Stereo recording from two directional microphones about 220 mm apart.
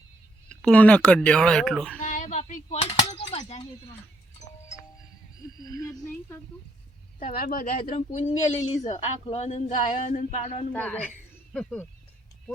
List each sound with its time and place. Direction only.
0.4 s speech: 5° left (ahead or behind)
2.0 s a sound: 35° left (ahead or behind)
3.3 s speech: 30° left (ahead or behind)
7.2 s speech: 40° left (ahead or behind)
10.7 s a woman's voice: 5° left (ahead or behind)